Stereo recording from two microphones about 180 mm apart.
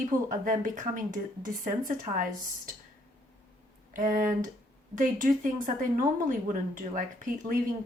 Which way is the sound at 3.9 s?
50° right (ahead or behind).